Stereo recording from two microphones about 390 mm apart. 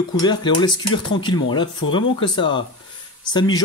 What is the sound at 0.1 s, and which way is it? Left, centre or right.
Speech, centre.